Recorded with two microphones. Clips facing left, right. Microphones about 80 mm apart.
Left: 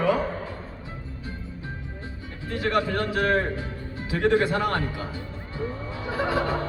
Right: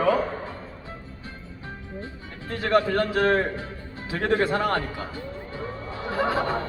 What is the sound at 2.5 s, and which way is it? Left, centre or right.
A man's voice, right.